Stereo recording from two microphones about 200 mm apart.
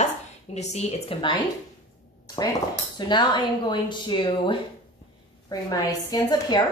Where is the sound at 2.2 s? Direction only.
20° left (ahead or behind).